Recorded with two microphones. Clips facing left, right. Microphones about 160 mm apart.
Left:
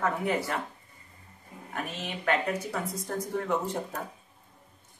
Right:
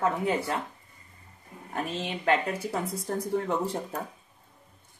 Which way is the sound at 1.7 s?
30° right (ahead or behind).